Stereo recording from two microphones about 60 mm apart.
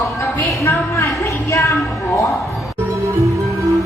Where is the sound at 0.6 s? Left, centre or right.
Left.